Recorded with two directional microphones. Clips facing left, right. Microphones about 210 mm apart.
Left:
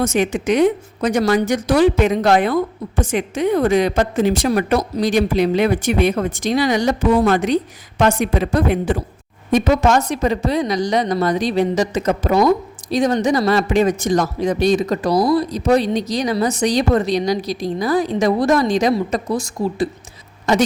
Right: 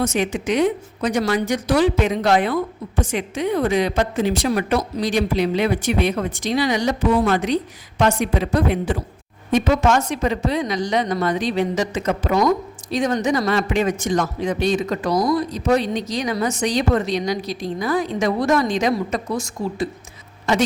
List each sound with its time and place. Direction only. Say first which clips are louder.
0.0 s a woman's voice: left 3 dB; 45° left (ahead or behind)